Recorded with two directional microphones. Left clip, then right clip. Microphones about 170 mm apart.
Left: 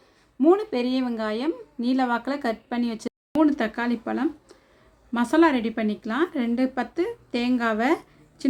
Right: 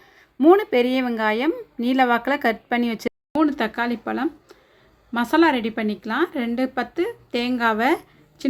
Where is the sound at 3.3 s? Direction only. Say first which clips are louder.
Even; 5° left (ahead or behind).